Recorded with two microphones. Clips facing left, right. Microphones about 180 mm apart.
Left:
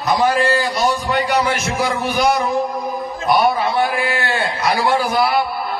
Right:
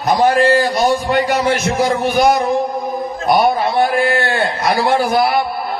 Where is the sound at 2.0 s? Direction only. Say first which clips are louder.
Right 3 dB; 50° right (ahead or behind).